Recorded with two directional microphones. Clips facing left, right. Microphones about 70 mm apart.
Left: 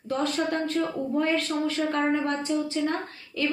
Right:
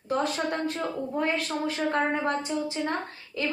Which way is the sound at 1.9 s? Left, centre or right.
Right.